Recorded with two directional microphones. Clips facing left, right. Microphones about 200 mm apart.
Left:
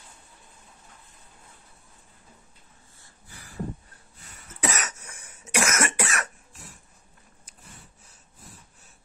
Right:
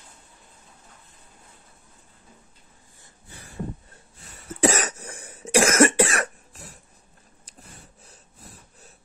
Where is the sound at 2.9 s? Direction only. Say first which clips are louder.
Right 3 dB; 20° right (ahead or behind).